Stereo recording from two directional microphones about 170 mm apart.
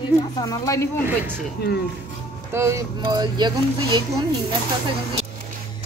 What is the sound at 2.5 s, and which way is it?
Speech, 15° right (ahead or behind).